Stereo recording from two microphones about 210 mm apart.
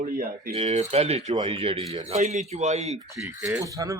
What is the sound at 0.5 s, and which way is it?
Speech, 30° right (ahead or behind).